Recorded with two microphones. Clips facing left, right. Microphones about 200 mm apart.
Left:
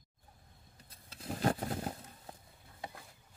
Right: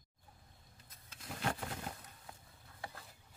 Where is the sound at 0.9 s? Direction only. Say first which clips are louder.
Left 7 dB; 30° left (ahead or behind).